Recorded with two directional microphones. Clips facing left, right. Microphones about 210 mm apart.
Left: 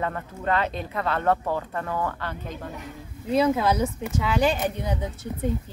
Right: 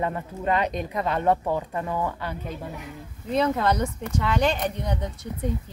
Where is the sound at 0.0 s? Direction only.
15° right (ahead or behind).